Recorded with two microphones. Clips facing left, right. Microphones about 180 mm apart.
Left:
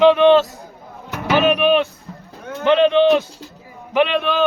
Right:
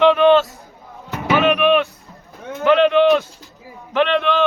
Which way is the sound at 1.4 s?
35° left (ahead or behind).